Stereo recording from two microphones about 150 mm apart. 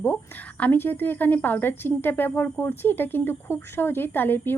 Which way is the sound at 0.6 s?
15° left (ahead or behind).